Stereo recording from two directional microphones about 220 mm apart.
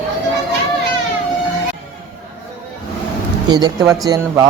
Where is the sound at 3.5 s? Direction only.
20° right (ahead or behind).